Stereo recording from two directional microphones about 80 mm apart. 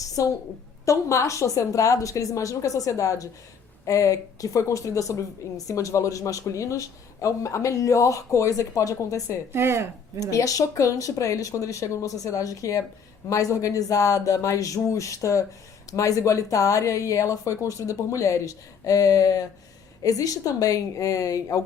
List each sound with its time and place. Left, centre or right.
0.0 s a sound: left
0.9 s speech: left
9.5 s speech: right
10.3 s speech: left